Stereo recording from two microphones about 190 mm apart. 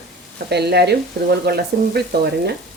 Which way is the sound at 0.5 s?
60° right (ahead or behind).